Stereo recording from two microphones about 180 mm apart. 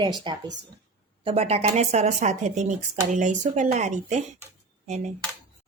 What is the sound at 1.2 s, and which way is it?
Speech, 35° right (ahead or behind).